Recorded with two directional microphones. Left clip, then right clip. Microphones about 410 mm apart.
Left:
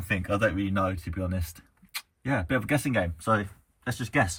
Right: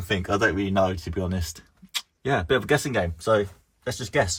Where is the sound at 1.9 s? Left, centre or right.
Centre.